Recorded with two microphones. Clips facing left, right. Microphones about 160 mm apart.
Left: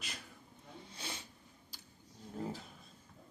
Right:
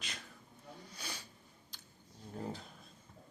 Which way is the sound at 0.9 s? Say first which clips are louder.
Left 3 dB; 25° left (ahead or behind).